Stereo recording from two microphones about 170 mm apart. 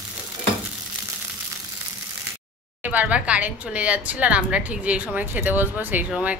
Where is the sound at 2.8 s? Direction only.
10° right (ahead or behind).